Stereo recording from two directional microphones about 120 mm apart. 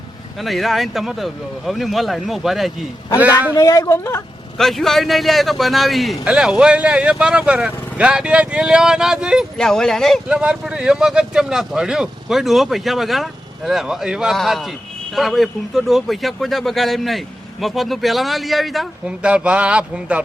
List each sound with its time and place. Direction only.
0.3 s speech: centre (ahead or behind)
3.5 s speech: 30° left (ahead or behind)
4.5 s speech: centre (ahead or behind)
9.6 s speech: 5° left (ahead or behind)
10.3 s speech: 10° right (ahead or behind)